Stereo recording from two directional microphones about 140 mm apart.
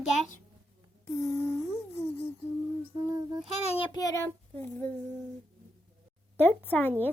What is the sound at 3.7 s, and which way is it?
Child singing, 35° left (ahead or behind).